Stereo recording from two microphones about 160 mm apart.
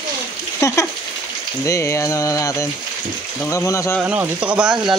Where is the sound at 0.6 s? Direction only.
20° left (ahead or behind).